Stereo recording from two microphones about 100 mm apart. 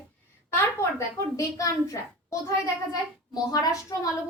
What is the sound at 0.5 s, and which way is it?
A woman's voice, 30° left (ahead or behind).